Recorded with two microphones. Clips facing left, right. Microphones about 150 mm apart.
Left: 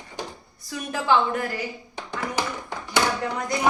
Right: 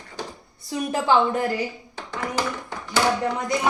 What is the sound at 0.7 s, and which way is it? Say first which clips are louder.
Speech: right 2 dB; 30° right (ahead or behind).